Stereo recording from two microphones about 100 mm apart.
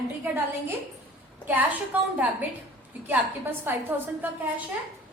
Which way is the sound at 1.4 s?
20° right (ahead or behind).